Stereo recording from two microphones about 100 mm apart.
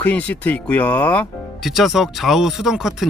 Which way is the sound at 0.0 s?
15° left (ahead or behind).